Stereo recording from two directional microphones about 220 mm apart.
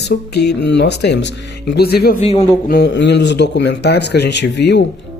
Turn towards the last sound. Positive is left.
turn(degrees=50)  # may be behind; listen again after turning